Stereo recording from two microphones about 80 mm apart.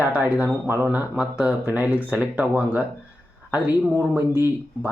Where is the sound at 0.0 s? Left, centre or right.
Right.